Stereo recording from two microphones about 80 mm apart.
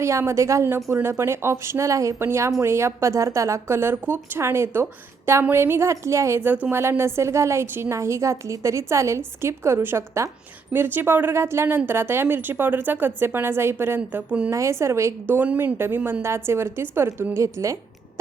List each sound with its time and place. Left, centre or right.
0.0 s speech: right
6.5 s a woman's voice: right
14.5 s speech: right
15.4 s a woman's voice: right
17.3 s speech: right